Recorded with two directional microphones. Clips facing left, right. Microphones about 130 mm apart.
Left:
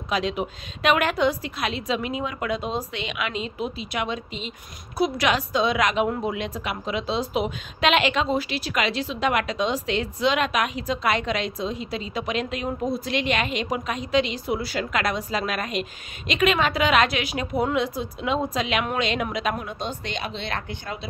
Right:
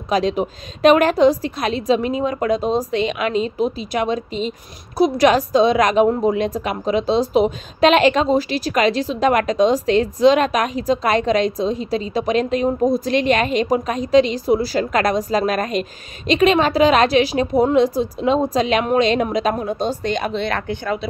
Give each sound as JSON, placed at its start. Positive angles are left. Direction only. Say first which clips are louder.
{"t": 0.1, "sound": "a woman's voice", "louder": "right 7 dB", "side_deg": -40}